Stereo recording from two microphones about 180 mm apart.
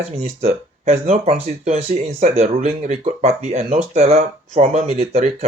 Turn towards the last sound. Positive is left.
turn(degrees=-35)  # may be behind; listen again after turning